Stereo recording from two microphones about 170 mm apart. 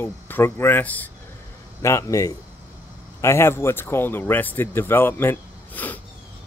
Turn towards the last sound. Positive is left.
turn(degrees=10)  # may be behind; listen again after turning